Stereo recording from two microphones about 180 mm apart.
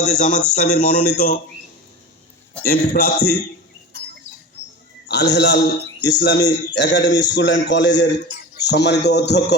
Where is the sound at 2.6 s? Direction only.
55° left (ahead or behind).